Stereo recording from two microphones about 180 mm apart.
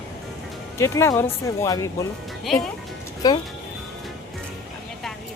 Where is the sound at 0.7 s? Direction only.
15° left (ahead or behind).